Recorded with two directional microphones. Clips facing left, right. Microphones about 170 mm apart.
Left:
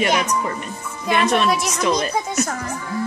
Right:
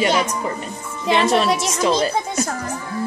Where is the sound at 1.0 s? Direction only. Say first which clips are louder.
Right 1 dB; 30° right (ahead or behind).